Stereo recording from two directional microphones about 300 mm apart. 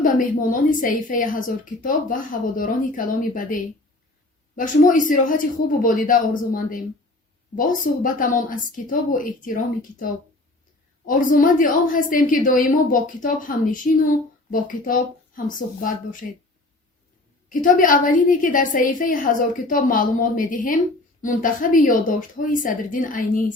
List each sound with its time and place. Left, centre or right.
0.0 s a woman's voice: left
11.0 s a woman's voice: left
17.5 s a woman's voice: left